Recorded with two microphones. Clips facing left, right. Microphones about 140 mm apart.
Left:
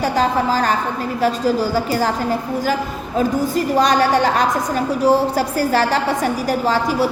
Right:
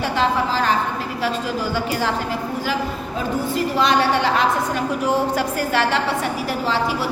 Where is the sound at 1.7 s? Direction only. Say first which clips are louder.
Left 4 dB; 40° left (ahead or behind).